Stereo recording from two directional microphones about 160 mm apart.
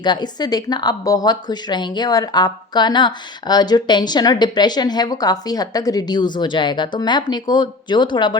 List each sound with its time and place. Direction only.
0.0 s speech: 25° left (ahead or behind)